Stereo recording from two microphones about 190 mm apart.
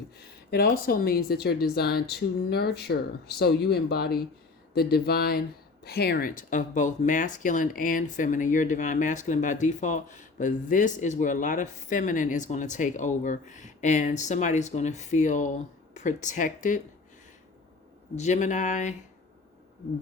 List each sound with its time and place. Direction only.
0.5 s speech: 50° left (ahead or behind)
18.2 s speech: 40° left (ahead or behind)